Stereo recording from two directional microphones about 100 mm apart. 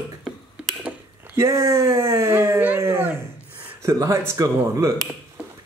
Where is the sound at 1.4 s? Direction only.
30° right (ahead or behind).